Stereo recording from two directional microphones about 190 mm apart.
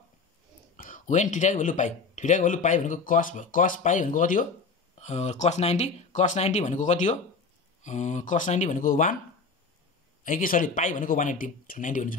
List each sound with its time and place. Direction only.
0.7 s speech: 45° left (ahead or behind)
10.2 s speech: 45° left (ahead or behind)